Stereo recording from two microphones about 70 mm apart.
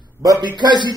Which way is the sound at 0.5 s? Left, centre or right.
Right.